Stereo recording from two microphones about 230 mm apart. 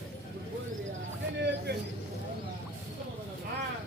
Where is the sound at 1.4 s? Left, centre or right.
Right.